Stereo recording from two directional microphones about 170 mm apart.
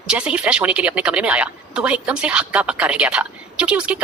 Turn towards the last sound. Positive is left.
turn(degrees=-5)  # may be behind; listen again after turning